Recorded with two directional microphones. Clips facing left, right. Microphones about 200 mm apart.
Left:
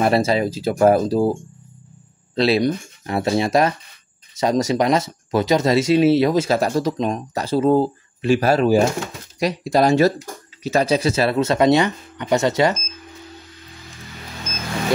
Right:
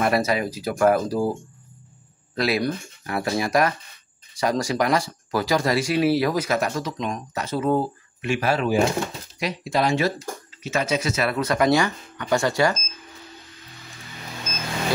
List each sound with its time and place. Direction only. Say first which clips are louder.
0.0 s speech: left 4 dB; 25° left (ahead or behind)
2.3 s speech: left 6 dB; 25° left (ahead or behind)